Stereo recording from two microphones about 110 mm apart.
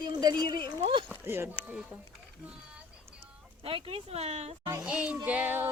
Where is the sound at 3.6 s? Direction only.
55° right (ahead or behind); by 4.5 s 75° right (ahead or behind).